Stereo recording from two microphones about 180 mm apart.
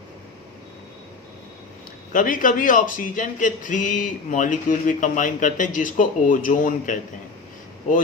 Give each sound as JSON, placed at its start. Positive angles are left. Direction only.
{"t": 2.1, "sound": "speech", "side_deg": 50}